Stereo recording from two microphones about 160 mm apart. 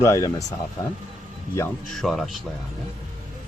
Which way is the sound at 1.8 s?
Centre (ahead or behind).